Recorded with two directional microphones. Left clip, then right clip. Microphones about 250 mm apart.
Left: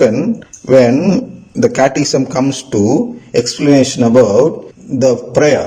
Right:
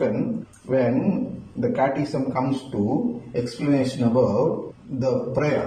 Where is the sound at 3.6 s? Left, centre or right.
Left.